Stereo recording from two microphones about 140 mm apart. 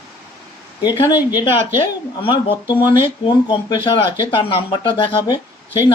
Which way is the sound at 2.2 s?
35° left (ahead or behind).